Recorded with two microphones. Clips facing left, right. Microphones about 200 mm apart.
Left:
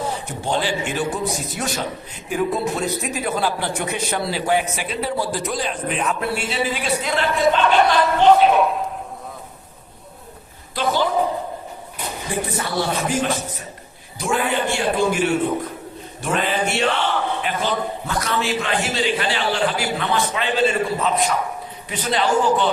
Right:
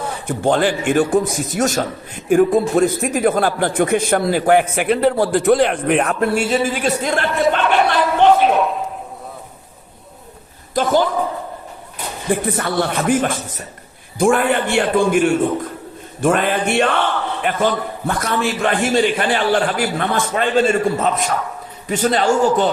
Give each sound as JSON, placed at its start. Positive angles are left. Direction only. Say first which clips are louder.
{"t": 0.3, "sound": "a man's voice", "louder": "right 10 dB", "side_deg": -55}
{"t": 7.8, "sound": "a sound", "louder": "right 2 dB", "side_deg": -5}
{"t": 10.8, "sound": "a man's voice", "louder": "right 4 dB", "side_deg": -45}
{"t": 12.3, "sound": "a man's voice", "louder": "right 6 dB", "side_deg": -55}